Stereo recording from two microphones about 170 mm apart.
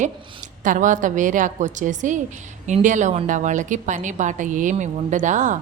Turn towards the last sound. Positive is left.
turn(degrees=-45)  # may be behind; listen again after turning